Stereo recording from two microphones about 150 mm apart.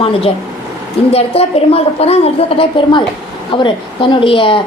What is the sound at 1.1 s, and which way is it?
A woman's voice, 40° left (ahead or behind).